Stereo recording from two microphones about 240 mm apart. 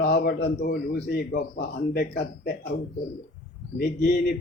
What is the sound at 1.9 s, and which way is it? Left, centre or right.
Speech, left.